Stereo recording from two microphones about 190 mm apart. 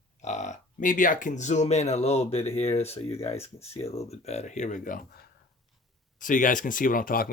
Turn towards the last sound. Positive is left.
turn(degrees=50)  # may be behind; listen again after turning